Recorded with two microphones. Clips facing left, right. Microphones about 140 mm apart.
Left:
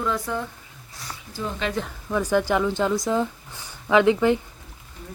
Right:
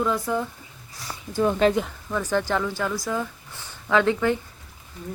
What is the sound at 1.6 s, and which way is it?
Speech, 45° right (ahead or behind).